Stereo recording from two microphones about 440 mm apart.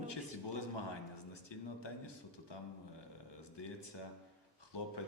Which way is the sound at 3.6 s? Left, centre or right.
Left.